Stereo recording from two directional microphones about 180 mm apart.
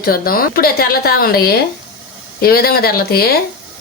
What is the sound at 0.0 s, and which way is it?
A woman's voice, 55° left (ahead or behind).